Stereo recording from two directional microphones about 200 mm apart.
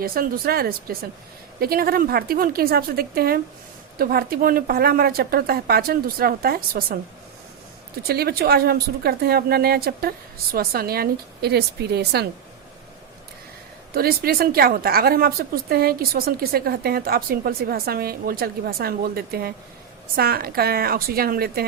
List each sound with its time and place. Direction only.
0.0 s a woman's voice: 45° right (ahead or behind)
8.0 s a woman's voice: 50° right (ahead or behind)
13.9 s a woman's voice: 50° right (ahead or behind)